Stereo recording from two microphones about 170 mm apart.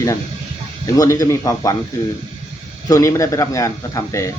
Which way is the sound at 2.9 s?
20° left (ahead or behind).